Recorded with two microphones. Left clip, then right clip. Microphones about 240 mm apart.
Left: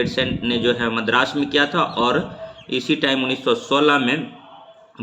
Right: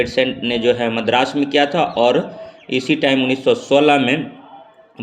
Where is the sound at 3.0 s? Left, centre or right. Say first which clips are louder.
Right 5 dB; left.